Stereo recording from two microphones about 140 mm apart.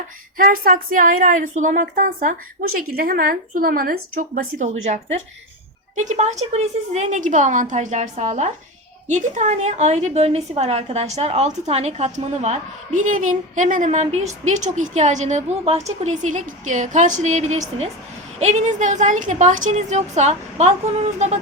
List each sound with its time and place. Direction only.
0.3 s a woman's voice: 90° right; by 21.3 s 55° right (ahead or behind)